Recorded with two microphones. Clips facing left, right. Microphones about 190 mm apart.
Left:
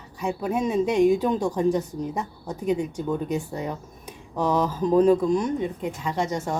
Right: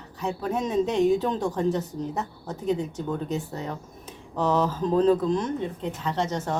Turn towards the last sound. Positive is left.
turn(degrees=10)  # may be behind; listen again after turning